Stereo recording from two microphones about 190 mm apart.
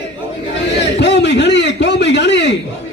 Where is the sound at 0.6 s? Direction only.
65° left (ahead or behind).